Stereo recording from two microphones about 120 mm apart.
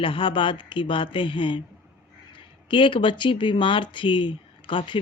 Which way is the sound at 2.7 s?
45° left (ahead or behind).